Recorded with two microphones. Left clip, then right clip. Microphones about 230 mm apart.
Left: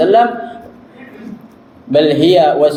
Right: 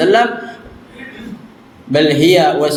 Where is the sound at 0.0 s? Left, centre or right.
Right.